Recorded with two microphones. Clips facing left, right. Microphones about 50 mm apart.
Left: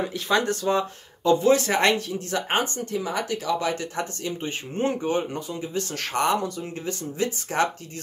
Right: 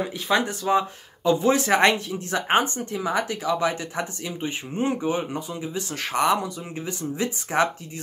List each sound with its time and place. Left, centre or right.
0.0 s speech: centre